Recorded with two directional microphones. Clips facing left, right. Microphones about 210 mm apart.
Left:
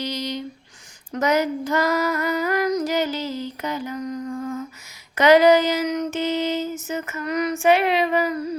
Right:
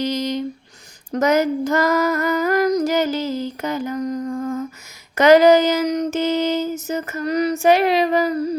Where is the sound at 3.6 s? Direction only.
45° right (ahead or behind).